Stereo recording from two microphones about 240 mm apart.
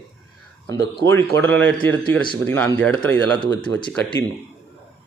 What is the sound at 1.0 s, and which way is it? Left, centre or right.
Speech, centre.